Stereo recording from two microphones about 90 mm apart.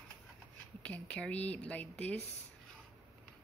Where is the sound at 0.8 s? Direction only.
15° left (ahead or behind).